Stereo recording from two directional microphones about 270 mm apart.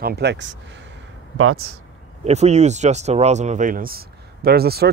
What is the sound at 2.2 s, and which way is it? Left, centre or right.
Speech, right.